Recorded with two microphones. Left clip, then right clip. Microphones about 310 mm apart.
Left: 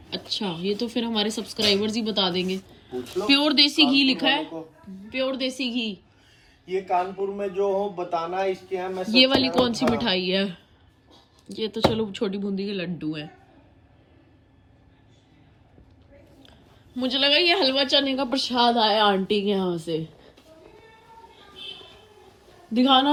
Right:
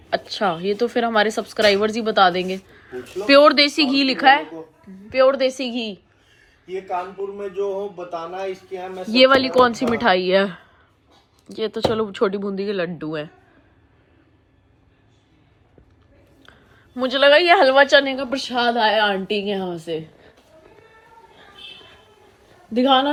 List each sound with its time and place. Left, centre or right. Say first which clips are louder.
0.3 s speech: right 3 dB; centre
6.7 s a man's voice: left 2 dB; centre
9.1 s speech: right 6 dB; centre
17.0 s a woman's voice: right 6 dB; centre
22.7 s speech: right 3 dB; centre